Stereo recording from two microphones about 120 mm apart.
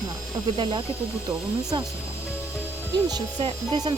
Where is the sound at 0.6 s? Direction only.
40° right (ahead or behind).